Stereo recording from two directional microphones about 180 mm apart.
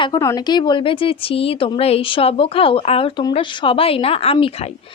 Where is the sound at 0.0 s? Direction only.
20° left (ahead or behind).